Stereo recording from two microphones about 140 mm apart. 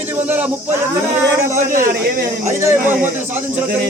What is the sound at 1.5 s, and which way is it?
Speech, 70° right (ahead or behind).